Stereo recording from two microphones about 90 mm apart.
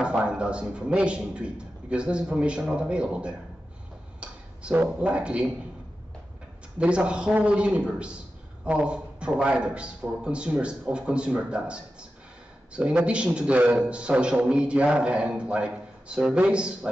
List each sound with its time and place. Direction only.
0.0 s a man's voice: 10° right (ahead or behind)
6.8 s a man's voice: 10° right (ahead or behind)